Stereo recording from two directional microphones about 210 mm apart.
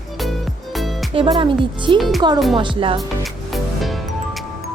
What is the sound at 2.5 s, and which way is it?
Speech, 25° right (ahead or behind).